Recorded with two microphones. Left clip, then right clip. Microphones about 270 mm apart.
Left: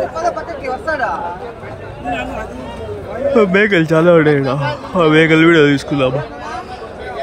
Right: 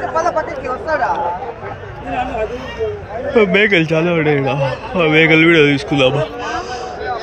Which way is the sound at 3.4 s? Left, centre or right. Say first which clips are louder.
Right 1 dB; centre.